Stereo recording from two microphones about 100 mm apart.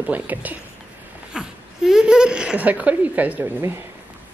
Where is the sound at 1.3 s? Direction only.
5° right (ahead or behind).